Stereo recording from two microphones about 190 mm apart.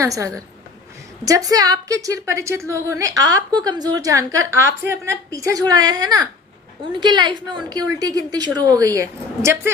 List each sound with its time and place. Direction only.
0.0 s a woman's voice: 15° right (ahead or behind)